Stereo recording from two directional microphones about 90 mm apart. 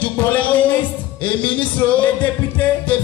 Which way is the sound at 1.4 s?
15° left (ahead or behind).